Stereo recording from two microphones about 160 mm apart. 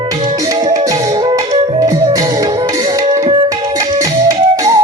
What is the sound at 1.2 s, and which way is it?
Music, 25° right (ahead or behind).